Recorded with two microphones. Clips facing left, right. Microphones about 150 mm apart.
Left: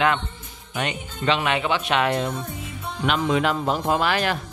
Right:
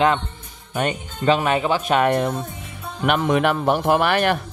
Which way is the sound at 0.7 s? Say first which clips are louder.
Right 4 dB; 45° right (ahead or behind).